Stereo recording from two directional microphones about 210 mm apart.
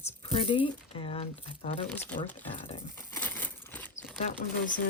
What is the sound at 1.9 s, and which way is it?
Speech, 10° left (ahead or behind).